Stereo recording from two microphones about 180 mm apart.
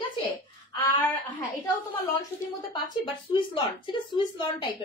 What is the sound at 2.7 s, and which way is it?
Speech, 30° left (ahead or behind).